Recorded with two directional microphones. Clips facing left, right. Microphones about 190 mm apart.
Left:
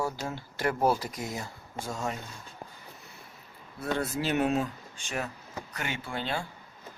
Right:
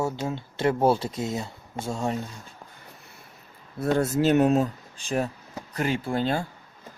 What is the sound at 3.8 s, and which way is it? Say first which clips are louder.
Speech: right 8 dB; 45° right (ahead or behind).